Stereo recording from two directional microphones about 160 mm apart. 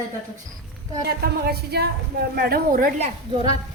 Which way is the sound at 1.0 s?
80° right.